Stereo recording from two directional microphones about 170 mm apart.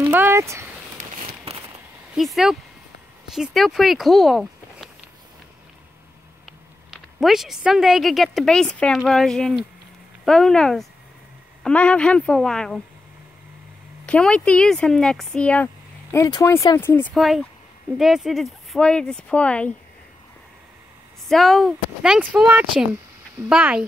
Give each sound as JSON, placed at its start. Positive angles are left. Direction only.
{"t": 0.0, "sound": "a sound", "side_deg": -10}
{"t": 2.1, "sound": "speech", "side_deg": 0}
{"t": 6.9, "sound": "speech", "side_deg": 0}
{"t": 14.0, "sound": "speech", "side_deg": 5}
{"t": 17.1, "sound": "speech", "side_deg": 0}
{"t": 21.3, "sound": "speech", "side_deg": 0}